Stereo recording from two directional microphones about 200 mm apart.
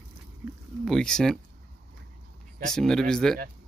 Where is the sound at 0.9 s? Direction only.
5° left (ahead or behind).